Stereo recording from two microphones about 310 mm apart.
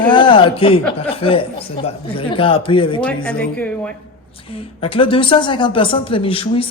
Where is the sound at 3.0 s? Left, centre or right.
Centre.